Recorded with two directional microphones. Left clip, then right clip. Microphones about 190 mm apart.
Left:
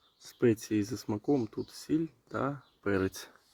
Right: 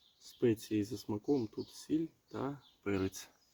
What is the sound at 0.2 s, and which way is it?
Speech, 35° left (ahead or behind).